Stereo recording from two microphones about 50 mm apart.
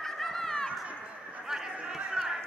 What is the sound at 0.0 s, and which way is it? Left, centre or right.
Chatter, centre.